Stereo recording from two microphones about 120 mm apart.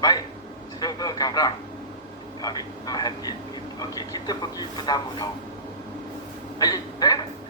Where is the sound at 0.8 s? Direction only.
30° left (ahead or behind).